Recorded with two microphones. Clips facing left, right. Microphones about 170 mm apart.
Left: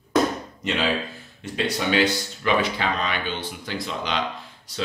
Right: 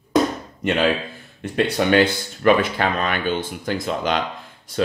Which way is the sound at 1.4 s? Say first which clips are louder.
Right 6 dB; 55° right (ahead or behind).